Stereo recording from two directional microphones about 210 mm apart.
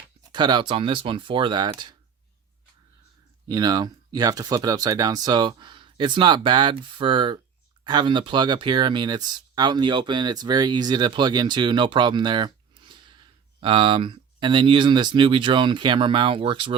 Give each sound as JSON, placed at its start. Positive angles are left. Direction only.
{"t": 0.2, "sound": "speech", "side_deg": -20}
{"t": 3.5, "sound": "speech", "side_deg": -20}
{"t": 12.8, "sound": "a sound", "side_deg": -25}
{"t": 13.6, "sound": "speech", "side_deg": -25}